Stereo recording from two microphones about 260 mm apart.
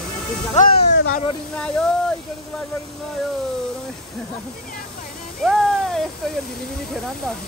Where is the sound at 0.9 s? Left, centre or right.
Left.